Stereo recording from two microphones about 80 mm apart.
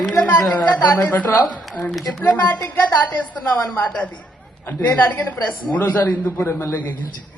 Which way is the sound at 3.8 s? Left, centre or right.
Centre.